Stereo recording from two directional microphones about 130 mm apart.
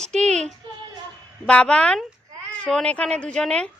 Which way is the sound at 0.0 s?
5° left (ahead or behind).